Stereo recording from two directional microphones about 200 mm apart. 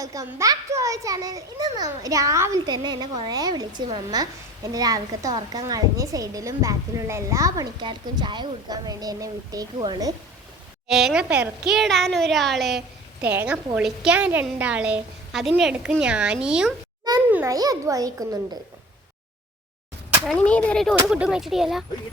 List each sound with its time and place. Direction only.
0.0 s a child's voice: 15° right (ahead or behind)
10.8 s a woman's voice: centre (ahead or behind)
17.3 s a child's voice: 15° right (ahead or behind)
20.2 s a woman's voice: 5° left (ahead or behind)